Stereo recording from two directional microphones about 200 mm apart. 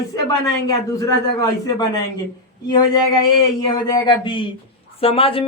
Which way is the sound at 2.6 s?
20° left (ahead or behind).